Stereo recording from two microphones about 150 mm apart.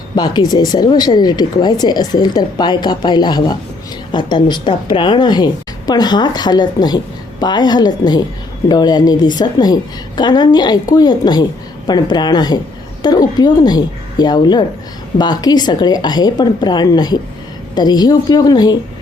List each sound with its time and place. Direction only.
0.2 s a woman's voice: 25° left (ahead or behind)